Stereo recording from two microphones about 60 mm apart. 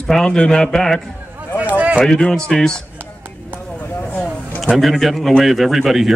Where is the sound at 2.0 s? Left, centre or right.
Centre.